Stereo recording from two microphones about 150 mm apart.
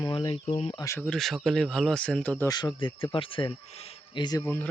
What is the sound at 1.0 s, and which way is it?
Speech, 5° left (ahead or behind).